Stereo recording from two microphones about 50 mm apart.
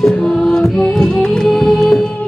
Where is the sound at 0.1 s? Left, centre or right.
Centre.